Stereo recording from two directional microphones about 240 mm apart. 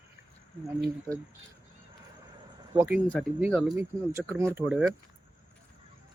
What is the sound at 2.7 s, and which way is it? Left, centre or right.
Speech, centre.